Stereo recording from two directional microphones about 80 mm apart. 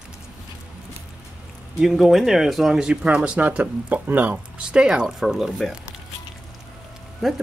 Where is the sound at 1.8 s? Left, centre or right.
Centre.